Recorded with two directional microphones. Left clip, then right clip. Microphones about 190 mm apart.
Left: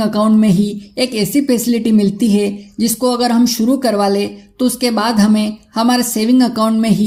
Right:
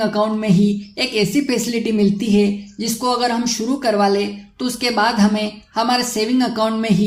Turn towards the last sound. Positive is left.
turn(degrees=50)  # may be behind; listen again after turning